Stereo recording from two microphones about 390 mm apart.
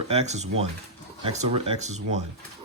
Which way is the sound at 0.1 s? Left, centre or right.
Centre.